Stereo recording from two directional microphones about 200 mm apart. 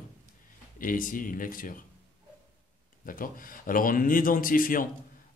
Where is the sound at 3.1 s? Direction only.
45° left (ahead or behind).